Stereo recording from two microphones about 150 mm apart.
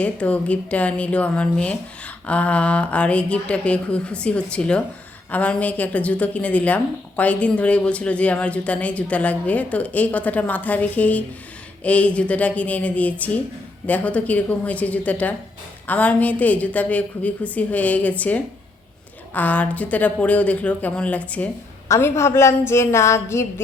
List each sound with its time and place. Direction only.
0.0 s a woman's voice: 10° left (ahead or behind)